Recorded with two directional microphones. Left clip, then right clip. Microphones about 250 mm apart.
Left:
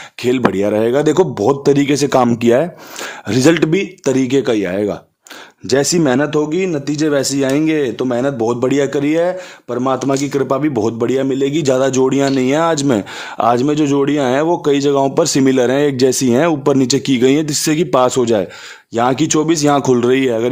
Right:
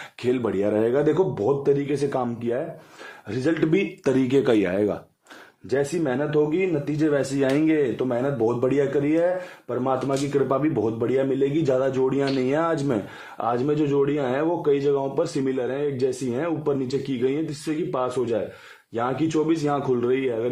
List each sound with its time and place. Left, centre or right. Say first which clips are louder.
0.2 s speech: left 9 dB; left
3.6 s speech: left 6 dB; left
5.7 s speech: left 10 dB; left